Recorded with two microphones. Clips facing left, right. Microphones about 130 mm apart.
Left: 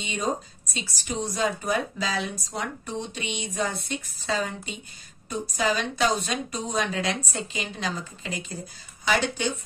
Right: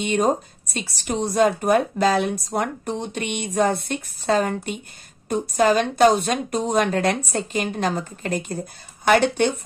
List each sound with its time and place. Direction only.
0.0 s speech: 55° right (ahead or behind)